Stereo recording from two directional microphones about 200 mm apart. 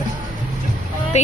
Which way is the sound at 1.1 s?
35° left (ahead or behind).